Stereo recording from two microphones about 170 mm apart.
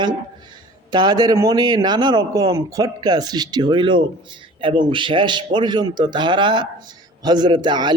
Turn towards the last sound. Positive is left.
turn(degrees=-25)  # may be behind; listen again after turning